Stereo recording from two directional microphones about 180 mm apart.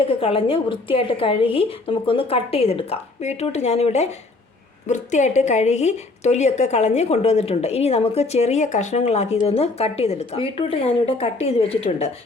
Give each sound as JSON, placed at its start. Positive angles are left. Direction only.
{"t": 0.0, "sound": "a woman's voice", "side_deg": 30}